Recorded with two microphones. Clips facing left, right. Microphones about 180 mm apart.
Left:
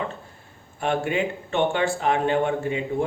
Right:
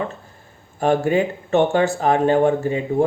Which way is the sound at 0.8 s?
40° right (ahead or behind).